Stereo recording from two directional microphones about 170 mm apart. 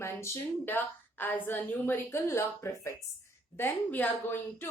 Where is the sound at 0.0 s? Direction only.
15° left (ahead or behind).